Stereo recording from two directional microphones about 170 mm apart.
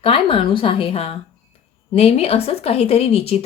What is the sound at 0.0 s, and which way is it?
A woman's voice, 30° left (ahead or behind).